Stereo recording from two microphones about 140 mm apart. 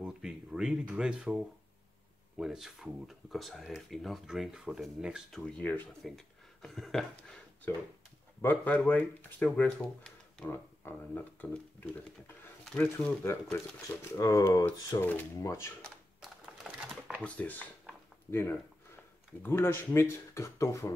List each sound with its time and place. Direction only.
0.0 s speech: 5° right (ahead or behind)
5.4 s speech: 10° left (ahead or behind)
6.0 s speech: centre (ahead or behind)
13.2 s speech: 20° left (ahead or behind)
15.0 s speech: 10° left (ahead or behind)
16.6 s typewriter: centre (ahead or behind)
17.2 s speech: 10° left (ahead or behind)